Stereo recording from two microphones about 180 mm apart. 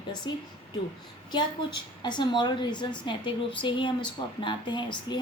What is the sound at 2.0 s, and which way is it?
A woman's voice, 25° left (ahead or behind).